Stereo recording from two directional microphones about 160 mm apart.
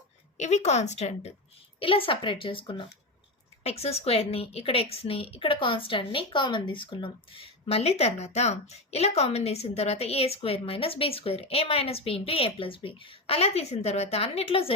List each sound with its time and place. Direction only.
0.3 s speech: 45° left (ahead or behind)
1.8 s a woman's voice: 35° left (ahead or behind)